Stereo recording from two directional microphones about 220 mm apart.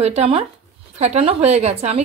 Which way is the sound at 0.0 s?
30° right (ahead or behind).